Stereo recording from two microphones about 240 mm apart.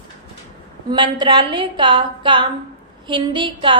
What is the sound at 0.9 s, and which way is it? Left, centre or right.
A woman's voice, centre.